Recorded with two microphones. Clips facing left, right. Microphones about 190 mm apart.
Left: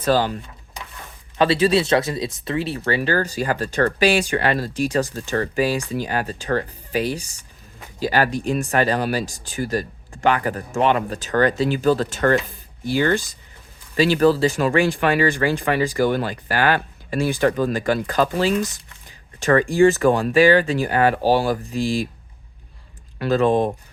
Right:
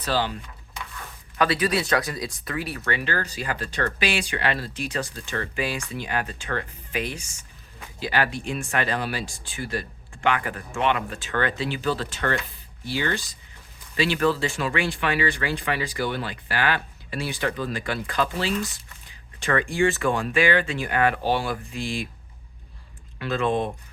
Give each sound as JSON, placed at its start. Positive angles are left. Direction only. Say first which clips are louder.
{"t": 0.0, "sound": "a sound", "louder": "left 7 dB", "side_deg": 45}
{"t": 1.4, "sound": "speech", "louder": "left 6 dB", "side_deg": 25}
{"t": 23.1, "sound": "speech", "louder": "left 7 dB", "side_deg": 40}